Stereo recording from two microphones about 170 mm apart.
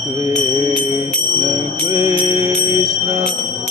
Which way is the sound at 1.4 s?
20° right (ahead or behind).